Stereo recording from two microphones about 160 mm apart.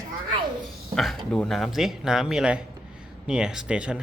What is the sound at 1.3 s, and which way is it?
Speech, 5° left (ahead or behind).